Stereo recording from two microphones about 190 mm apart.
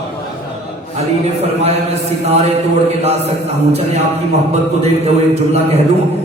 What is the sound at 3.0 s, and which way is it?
A man's voice, 35° right (ahead or behind).